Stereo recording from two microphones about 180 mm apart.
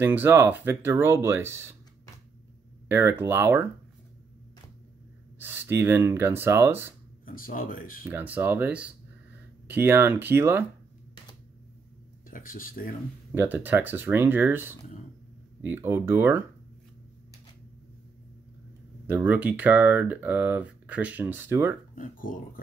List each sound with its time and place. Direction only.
0.0 s speech: 10° right (ahead or behind)
2.9 s speech: 10° right (ahead or behind)
5.4 s speech: 10° right (ahead or behind)
7.2 s speech: 50° left (ahead or behind)
8.0 s speech: 10° right (ahead or behind)
12.3 s speech: 50° left (ahead or behind)
13.3 s speech: 10° right (ahead or behind)
19.0 s speech: 10° right (ahead or behind)
21.9 s speech: 50° left (ahead or behind)